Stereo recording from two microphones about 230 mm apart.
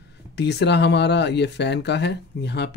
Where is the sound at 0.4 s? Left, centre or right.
Left.